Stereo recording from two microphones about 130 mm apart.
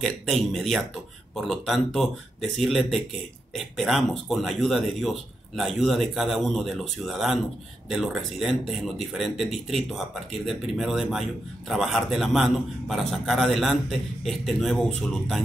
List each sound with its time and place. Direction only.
0.0 s a man's voice: 5° left (ahead or behind)